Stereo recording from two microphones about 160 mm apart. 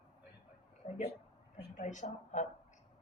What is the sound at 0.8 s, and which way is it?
A woman's voice, 50° left (ahead or behind).